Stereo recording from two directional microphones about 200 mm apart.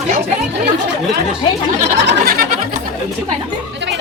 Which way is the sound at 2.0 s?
50° right (ahead or behind).